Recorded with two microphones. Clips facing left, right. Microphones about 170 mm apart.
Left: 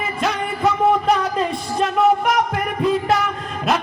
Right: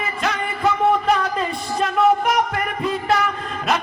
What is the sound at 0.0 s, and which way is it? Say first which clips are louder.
Music: left 2 dB; centre (ahead or behind).